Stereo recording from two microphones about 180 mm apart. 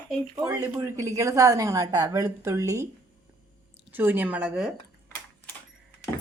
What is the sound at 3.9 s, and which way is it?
Speech, 10° right (ahead or behind).